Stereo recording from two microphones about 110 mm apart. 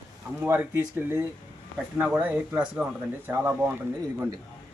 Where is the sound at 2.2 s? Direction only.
15° right (ahead or behind).